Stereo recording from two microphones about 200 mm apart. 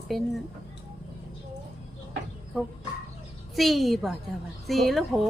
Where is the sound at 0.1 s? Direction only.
Centre (ahead or behind).